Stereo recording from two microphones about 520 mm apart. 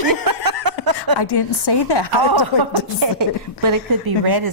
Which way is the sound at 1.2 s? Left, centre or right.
Left.